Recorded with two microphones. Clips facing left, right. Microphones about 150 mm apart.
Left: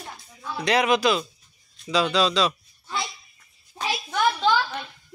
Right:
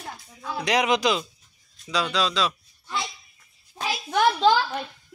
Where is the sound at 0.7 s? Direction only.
15° right (ahead or behind).